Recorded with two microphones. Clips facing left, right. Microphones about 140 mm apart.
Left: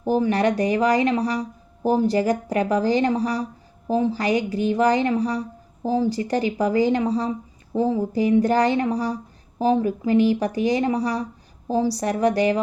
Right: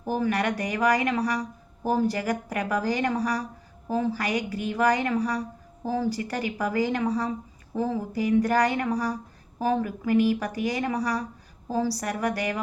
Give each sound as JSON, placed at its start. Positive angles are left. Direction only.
{"t": 0.0, "sound": "speech", "side_deg": 25}